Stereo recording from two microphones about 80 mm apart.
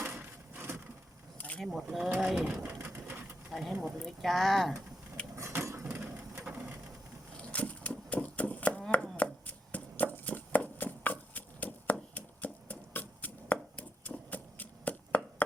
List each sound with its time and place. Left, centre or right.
0.0 s wood: right
1.4 s a sound: centre
1.6 s speech: centre
2.8 s bird: right
3.5 s speech: centre
5.4 s vehicle: right
6.0 s a sound: right
7.5 s chopping: centre